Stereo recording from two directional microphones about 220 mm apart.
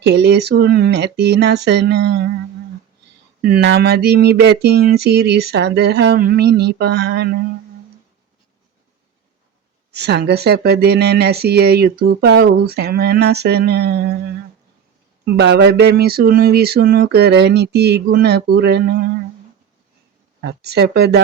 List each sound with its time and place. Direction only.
0.0 s speech: 50° right (ahead or behind)
3.4 s speech: 50° right (ahead or behind)
9.9 s speech: 50° right (ahead or behind)
15.2 s speech: 50° right (ahead or behind)
20.4 s speech: 50° right (ahead or behind)